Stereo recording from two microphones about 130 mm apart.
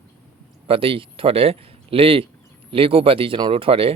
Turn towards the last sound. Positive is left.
turn(degrees=-45)  # may be behind; listen again after turning